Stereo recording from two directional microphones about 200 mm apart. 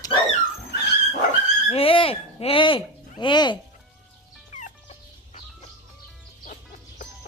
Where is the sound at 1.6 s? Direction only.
30° left (ahead or behind).